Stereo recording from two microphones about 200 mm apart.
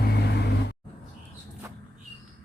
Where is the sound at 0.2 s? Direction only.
55° left (ahead or behind).